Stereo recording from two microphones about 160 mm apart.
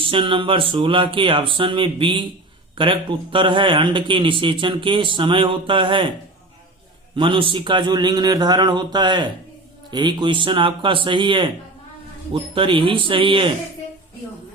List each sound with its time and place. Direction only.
0.1 s a man's voice: 30° right (ahead or behind)
7.2 s a man's voice: 30° right (ahead or behind)